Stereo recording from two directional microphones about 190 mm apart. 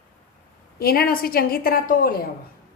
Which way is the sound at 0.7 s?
55° left (ahead or behind).